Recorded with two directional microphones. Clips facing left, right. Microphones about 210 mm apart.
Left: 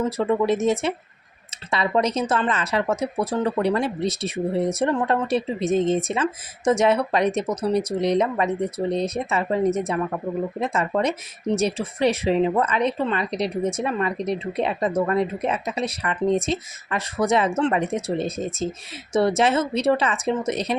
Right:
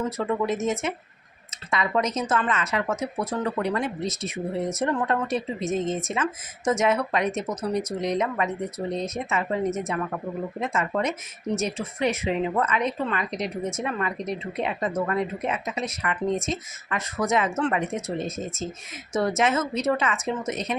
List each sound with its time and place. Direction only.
0.2 s speech: 30° left (ahead or behind)